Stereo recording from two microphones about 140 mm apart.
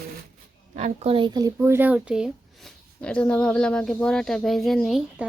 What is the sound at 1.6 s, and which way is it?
Speech, 15° right (ahead or behind).